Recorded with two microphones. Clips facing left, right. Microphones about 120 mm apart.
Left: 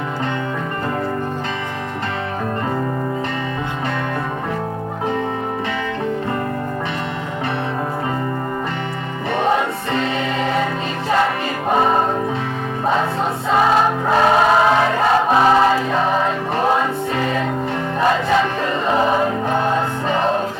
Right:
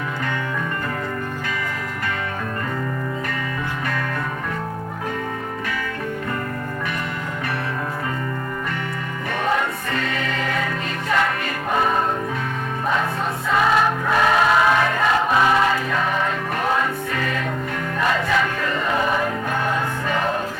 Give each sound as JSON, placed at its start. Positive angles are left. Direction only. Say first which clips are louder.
{"t": 9.4, "sound": "music", "louder": "left 4 dB", "side_deg": 25}
{"t": 11.7, "sound": "music", "louder": "left 4 dB", "side_deg": 30}
{"t": 14.1, "sound": "music", "louder": "left 4 dB", "side_deg": 30}